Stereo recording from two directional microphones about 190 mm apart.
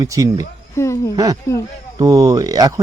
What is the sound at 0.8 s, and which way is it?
Speech, 15° left (ahead or behind).